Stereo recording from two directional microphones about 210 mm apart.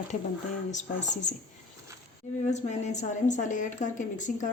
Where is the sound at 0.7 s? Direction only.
35° left (ahead or behind).